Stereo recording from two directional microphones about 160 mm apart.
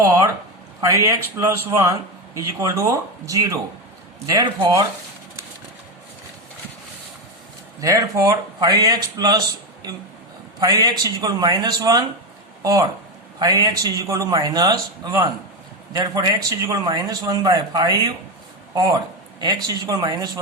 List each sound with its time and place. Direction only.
0.0 s a man's voice: 20° right (ahead or behind)
7.8 s a man's voice: 20° right (ahead or behind)
10.6 s a man's voice: 25° right (ahead or behind)